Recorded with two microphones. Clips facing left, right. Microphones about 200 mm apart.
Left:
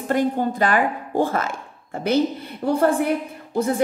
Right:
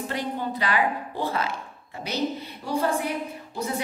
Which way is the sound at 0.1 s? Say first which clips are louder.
Left 12 dB; 50° left (ahead or behind).